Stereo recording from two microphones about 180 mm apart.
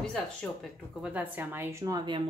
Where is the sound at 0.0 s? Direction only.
5° left (ahead or behind).